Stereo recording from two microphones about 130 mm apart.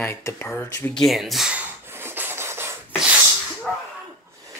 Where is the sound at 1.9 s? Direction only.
15° right (ahead or behind).